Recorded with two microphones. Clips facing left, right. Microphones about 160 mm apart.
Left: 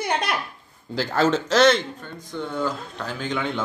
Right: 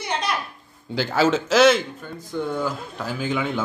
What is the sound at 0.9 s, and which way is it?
A man's voice, centre (ahead or behind).